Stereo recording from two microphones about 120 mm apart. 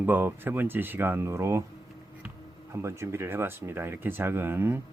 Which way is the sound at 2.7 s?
25° right (ahead or behind).